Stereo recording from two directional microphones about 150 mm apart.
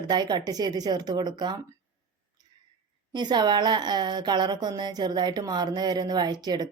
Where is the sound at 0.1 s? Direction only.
30° right (ahead or behind).